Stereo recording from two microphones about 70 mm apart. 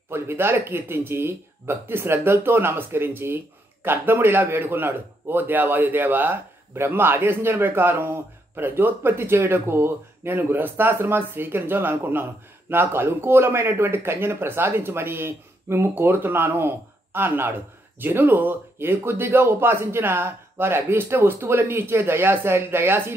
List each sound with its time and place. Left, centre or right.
0.1 s a man's voice: right